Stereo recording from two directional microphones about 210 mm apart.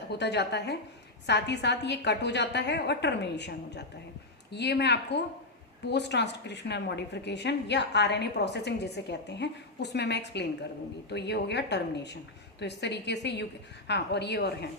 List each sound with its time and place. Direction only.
0.1 s a woman's voice: 55° left (ahead or behind)